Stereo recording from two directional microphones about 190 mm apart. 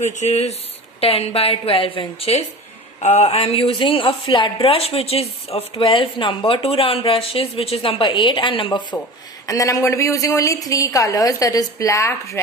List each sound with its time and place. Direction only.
0.0 s a woman's voice: 40° left (ahead or behind); by 12.4 s 15° left (ahead or behind)